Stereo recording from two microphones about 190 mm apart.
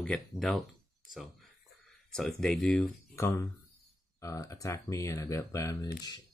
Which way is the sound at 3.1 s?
15° left (ahead or behind).